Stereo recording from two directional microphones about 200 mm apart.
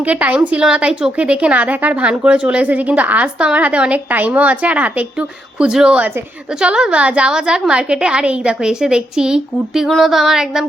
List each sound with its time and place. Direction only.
0.0 s a woman's voice: 5° right (ahead or behind)